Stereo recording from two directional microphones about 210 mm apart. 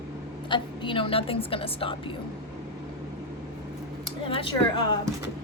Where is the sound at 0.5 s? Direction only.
25° left (ahead or behind).